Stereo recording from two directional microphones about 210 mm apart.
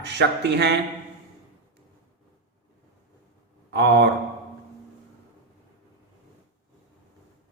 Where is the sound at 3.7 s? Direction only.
55° right (ahead or behind).